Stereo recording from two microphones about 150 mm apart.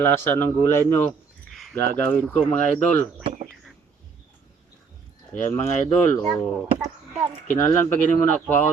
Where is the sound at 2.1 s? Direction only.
10° left (ahead or behind).